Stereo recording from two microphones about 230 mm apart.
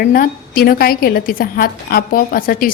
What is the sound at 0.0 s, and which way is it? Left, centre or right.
A woman's voice, left.